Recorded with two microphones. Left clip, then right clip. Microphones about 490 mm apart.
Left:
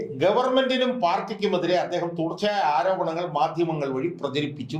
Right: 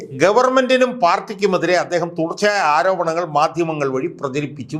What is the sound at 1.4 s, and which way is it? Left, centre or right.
A man's voice, right.